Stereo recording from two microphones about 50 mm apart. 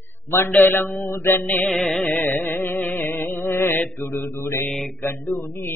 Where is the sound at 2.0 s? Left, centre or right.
Left.